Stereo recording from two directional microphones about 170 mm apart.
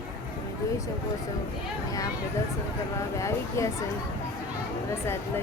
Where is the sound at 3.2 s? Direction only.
15° left (ahead or behind).